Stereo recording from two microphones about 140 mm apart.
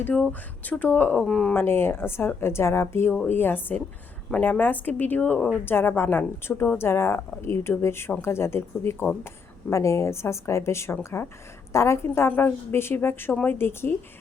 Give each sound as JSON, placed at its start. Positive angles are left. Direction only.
{"t": 0.0, "sound": "a woman's voice", "side_deg": 10}
{"t": 1.5, "sound": "a woman's voice", "side_deg": 15}